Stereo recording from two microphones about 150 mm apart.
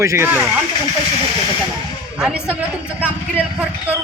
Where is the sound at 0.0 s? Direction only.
15° right (ahead or behind).